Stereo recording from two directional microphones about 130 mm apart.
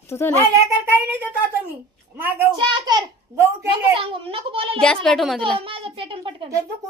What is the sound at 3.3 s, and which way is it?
Speech, 20° right (ahead or behind).